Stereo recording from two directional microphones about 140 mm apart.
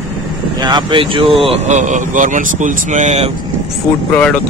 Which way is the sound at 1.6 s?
60° right (ahead or behind).